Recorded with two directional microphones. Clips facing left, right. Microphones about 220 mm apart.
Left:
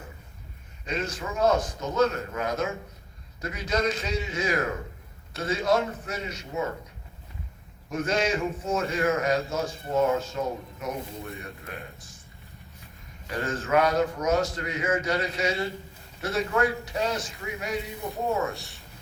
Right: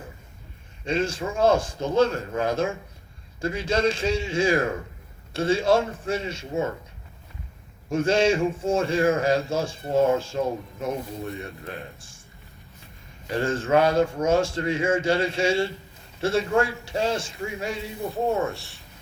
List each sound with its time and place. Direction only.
0.9 s a man's voice: 30° right (ahead or behind)
7.9 s a man's voice: 30° right (ahead or behind)
13.3 s a man's voice: 30° right (ahead or behind)
18.3 s speech: centre (ahead or behind)